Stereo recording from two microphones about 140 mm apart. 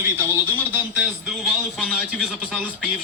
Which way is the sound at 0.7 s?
10° right (ahead or behind).